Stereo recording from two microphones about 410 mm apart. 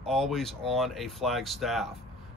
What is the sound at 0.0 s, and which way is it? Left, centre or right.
Speech, centre.